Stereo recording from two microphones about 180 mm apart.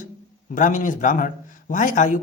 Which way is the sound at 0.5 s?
45° left (ahead or behind).